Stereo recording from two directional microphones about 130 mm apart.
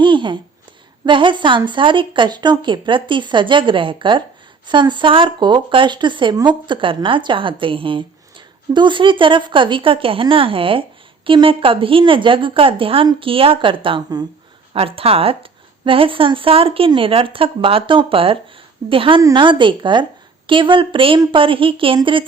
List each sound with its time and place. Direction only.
0.0 s a sound: 40° right (ahead or behind)
1.0 s a woman's voice: 40° right (ahead or behind)
14.7 s a woman's voice: 45° right (ahead or behind)